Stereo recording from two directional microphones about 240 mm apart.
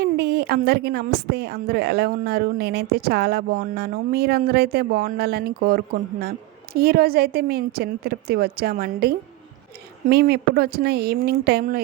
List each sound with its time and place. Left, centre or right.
0.0 s a woman's voice: right